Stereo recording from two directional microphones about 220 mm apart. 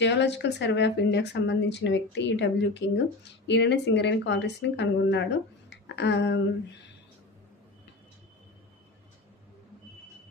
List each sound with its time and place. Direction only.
0.0 s a woman's voice: 50° left (ahead or behind)